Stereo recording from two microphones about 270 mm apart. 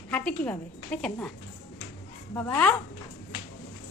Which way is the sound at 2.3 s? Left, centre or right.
Centre.